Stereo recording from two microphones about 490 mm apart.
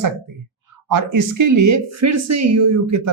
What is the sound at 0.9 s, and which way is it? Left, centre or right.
A woman's voice, right.